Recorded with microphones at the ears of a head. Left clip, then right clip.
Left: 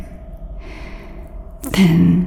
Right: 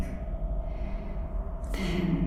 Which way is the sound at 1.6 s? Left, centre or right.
Left.